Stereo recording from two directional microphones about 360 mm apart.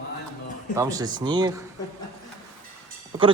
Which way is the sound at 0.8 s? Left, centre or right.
Centre.